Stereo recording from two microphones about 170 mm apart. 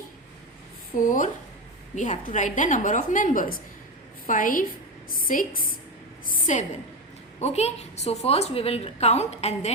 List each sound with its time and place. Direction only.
0.9 s a woman's voice: 50° left (ahead or behind)